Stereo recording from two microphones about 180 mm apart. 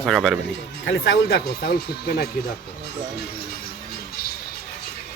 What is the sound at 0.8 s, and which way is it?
Speech, 70° left (ahead or behind).